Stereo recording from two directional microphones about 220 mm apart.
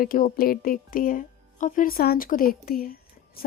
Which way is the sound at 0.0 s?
40° left (ahead or behind).